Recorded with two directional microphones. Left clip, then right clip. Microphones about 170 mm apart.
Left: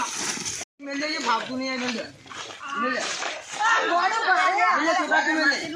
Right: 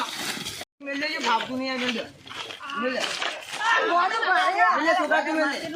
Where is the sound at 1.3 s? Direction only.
25° right (ahead or behind).